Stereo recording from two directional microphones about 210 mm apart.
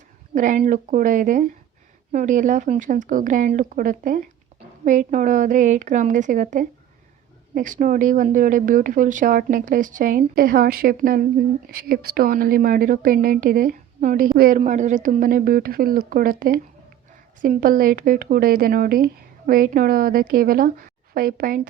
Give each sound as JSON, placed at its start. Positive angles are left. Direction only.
{"t": 0.3, "sound": "a woman's voice", "side_deg": -40}